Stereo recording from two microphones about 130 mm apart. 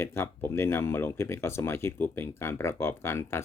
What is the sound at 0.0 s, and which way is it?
Speech, 20° left (ahead or behind).